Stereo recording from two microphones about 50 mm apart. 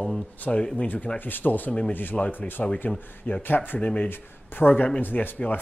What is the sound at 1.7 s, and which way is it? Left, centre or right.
Speech, left.